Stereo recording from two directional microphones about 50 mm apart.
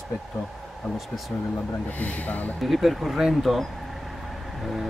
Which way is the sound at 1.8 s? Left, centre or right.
Left.